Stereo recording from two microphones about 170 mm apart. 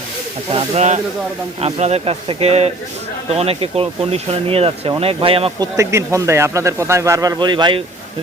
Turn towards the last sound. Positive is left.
turn(degrees=-25)  # may be behind; listen again after turning